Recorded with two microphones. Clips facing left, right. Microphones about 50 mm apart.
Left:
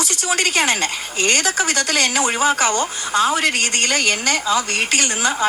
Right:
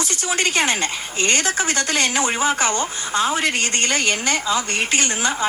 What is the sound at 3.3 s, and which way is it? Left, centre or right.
Speech, centre.